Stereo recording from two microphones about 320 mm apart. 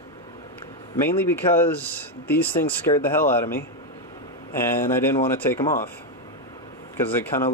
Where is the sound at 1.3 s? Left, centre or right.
Centre.